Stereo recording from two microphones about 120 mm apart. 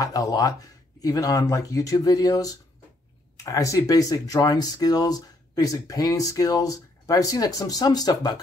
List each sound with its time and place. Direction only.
0.0 s speech: 30° left (ahead or behind)